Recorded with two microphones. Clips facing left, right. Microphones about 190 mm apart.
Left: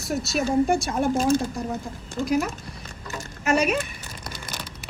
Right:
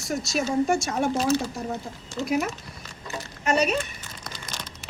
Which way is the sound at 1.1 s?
50° left (ahead or behind).